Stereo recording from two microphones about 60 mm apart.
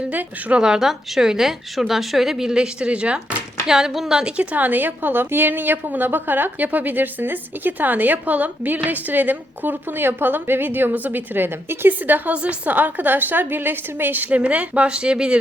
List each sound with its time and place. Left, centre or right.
0.1 s a woman's voice: right
0.6 s a woman's voice: centre
4.4 s a woman's voice: right
12.3 s a woman's voice: right